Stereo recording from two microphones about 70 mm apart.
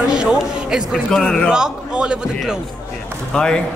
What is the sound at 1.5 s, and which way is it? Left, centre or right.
Speech, centre.